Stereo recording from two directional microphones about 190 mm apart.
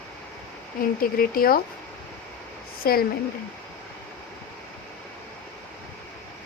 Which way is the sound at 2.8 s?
55° left (ahead or behind).